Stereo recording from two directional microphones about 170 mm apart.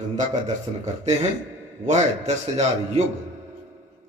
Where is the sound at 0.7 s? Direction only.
35° right (ahead or behind).